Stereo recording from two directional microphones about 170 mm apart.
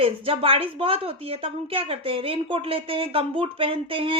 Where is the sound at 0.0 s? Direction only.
35° right (ahead or behind).